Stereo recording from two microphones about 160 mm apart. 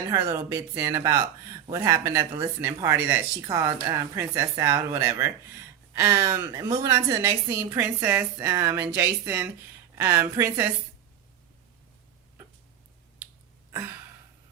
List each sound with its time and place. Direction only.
0.1 s a woman's voice: 20° right (ahead or behind)